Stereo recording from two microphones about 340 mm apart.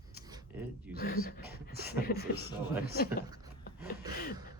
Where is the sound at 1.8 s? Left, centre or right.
Left.